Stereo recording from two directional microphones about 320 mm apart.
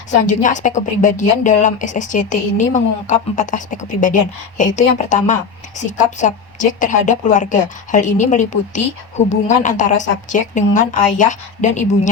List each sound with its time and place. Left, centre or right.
0.3 s speech: left